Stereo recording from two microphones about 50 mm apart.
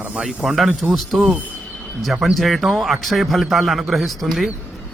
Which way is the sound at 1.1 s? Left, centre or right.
Centre.